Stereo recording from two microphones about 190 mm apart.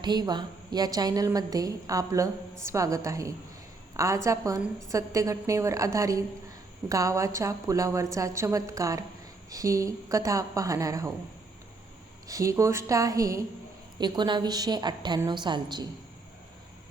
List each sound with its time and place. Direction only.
0.0 s a woman's voice: 20° right (ahead or behind)
12.3 s a woman's voice: 15° right (ahead or behind)